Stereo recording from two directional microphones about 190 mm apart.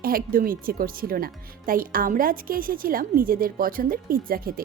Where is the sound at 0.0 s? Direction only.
50° right (ahead or behind).